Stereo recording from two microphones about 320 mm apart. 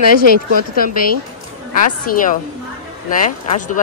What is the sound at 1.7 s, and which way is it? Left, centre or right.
A woman's voice, left.